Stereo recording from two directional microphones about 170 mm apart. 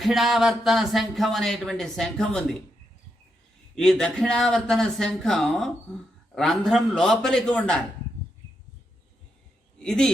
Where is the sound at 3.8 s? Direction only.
5° left (ahead or behind).